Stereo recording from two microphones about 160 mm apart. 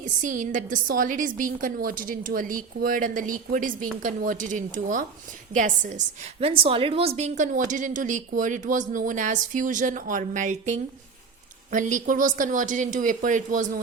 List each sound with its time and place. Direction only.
0.0 s a woman's voice: 50° right (ahead or behind)
6.4 s a woman's voice: 35° right (ahead or behind); by 13.7 s 55° right (ahead or behind)